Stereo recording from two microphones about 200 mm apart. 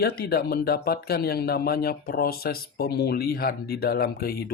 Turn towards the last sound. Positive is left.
turn(degrees=50)  # may be behind; listen again after turning